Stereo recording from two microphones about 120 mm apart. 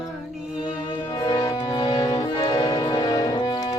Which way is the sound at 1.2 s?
35° left (ahead or behind).